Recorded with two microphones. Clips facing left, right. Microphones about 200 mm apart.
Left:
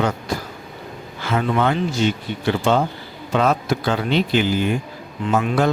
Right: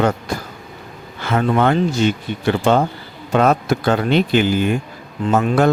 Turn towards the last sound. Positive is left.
turn(degrees=-45)  # may be behind; listen again after turning